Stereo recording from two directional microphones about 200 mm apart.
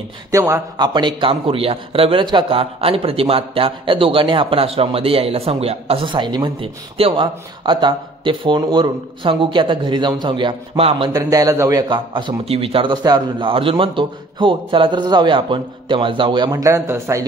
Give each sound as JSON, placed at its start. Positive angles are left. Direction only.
{"t": 0.3, "sound": "a man's voice", "side_deg": -15}
{"t": 11.2, "sound": "a man's voice", "side_deg": -15}